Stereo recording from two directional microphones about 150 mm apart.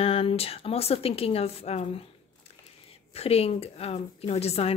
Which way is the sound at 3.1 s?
40° left (ahead or behind).